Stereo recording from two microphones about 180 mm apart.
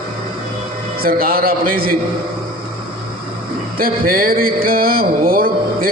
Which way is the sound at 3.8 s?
55° right (ahead or behind).